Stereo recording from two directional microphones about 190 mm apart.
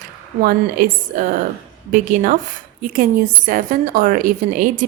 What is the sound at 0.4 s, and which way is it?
Speech, 45° right (ahead or behind).